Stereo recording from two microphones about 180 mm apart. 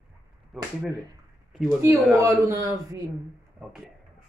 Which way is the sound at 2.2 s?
15° right (ahead or behind).